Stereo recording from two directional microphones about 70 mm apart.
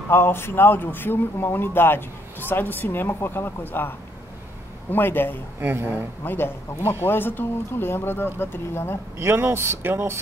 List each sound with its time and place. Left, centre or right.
0.1 s speech: left
4.9 s a man's voice: left
5.6 s speech: right
6.2 s speech: left
9.2 s speech: right